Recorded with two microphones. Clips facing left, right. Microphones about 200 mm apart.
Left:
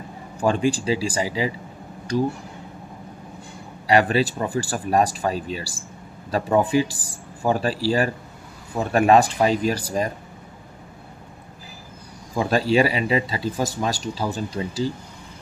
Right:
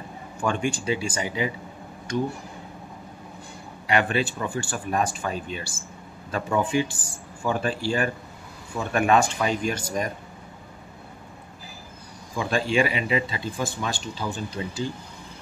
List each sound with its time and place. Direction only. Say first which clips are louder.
0.4 s speech: left 5 dB; 35° left (ahead or behind)
3.8 s speech: left 5 dB; 35° left (ahead or behind)
12.4 s speech: left 4 dB; 40° left (ahead or behind)